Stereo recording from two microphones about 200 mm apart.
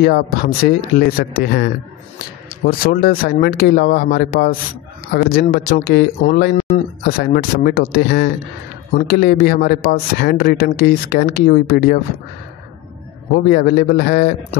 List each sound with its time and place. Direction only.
0.7 s a man's voice: 50° left (ahead or behind)
13.3 s a man's voice: 50° left (ahead or behind)